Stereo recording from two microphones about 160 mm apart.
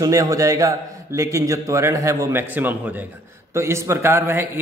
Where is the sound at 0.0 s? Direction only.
20° right (ahead or behind).